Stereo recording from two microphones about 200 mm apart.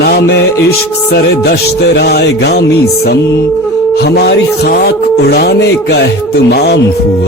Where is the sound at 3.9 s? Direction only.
55° left (ahead or behind).